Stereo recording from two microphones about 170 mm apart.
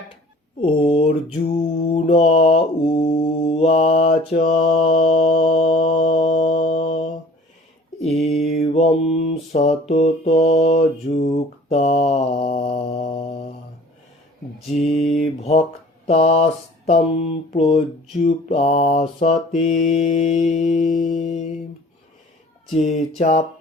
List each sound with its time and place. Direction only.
0.6 s speech: 30° left (ahead or behind)
1.5 s mantra: 35° left (ahead or behind)
8.0 s mantra: centre (ahead or behind)
8.4 s mantra: 35° left (ahead or behind)
14.9 s mantra: centre (ahead or behind)
16.0 s mantra: 35° left (ahead or behind)
22.8 s mantra: 40° left (ahead or behind)